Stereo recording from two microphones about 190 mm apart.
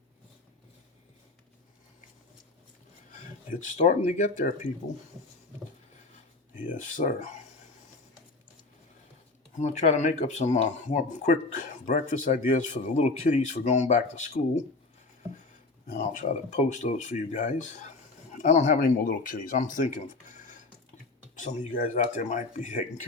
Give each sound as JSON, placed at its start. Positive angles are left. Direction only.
{"t": 3.8, "sound": "speech", "side_deg": 40}
{"t": 6.7, "sound": "speech", "side_deg": 40}
{"t": 9.6, "sound": "speech", "side_deg": 40}
{"t": 15.9, "sound": "speech", "side_deg": 40}
{"t": 21.3, "sound": "speech", "side_deg": 40}